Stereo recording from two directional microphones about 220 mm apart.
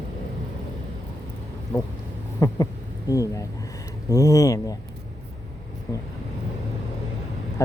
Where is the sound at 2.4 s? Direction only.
15° left (ahead or behind).